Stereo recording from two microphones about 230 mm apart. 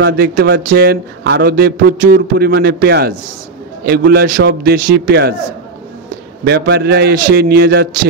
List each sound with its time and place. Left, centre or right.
0.0 s a man's voice: right
6.4 s a man's voice: right